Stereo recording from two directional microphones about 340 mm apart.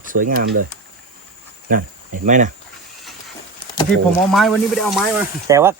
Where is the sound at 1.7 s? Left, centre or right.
Right.